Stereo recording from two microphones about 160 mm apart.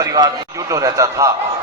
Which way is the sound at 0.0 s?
25° right (ahead or behind).